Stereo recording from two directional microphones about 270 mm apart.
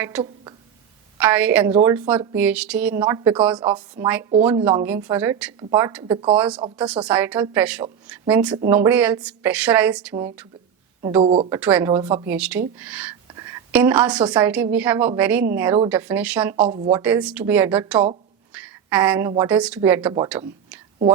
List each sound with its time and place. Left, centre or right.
1.2 s a woman's voice: centre
11.2 s a woman's voice: right; by 16.6 s centre
16.6 s a woman's voice: right
16.9 s a woman's voice: centre
18.5 s a sound: centre
19.5 s a woman's voice: centre